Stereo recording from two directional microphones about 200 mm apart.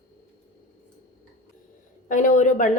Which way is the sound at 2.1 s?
40° left (ahead or behind).